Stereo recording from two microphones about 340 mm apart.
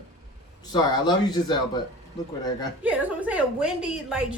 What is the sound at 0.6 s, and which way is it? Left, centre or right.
Speech, centre.